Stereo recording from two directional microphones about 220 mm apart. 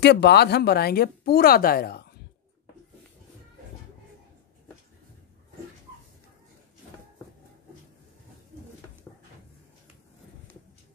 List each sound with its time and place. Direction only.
0.0 s speech: 50° left (ahead or behind)